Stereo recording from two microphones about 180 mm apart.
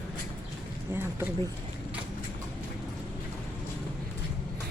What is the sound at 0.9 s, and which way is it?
Speech, 10° right (ahead or behind).